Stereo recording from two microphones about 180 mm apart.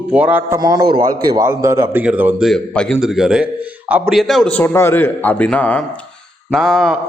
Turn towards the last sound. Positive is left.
turn(degrees=0)  # may be behind; listen again after turning